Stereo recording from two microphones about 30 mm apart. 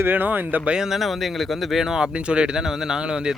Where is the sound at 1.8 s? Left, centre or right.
Centre.